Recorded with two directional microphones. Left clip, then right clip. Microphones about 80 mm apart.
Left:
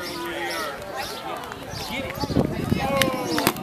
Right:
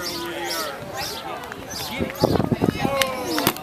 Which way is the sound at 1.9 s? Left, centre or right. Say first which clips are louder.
Right 1 dB; left.